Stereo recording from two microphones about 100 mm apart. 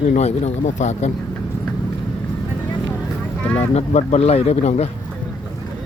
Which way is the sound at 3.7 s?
90° left.